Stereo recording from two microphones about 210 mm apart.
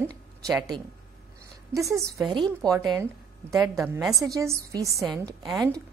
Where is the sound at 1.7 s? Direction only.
15° right (ahead or behind).